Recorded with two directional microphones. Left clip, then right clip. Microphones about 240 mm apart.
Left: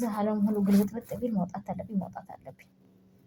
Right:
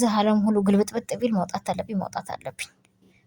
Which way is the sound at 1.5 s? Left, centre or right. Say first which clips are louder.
Right 9 dB; right.